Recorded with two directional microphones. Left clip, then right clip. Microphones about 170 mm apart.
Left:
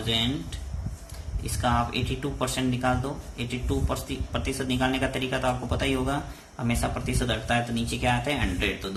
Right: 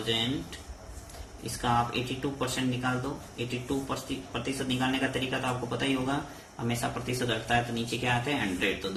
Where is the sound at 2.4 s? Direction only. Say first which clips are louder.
Left 5 dB; 50° left (ahead or behind).